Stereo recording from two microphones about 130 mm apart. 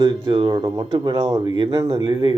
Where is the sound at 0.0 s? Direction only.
35° right (ahead or behind).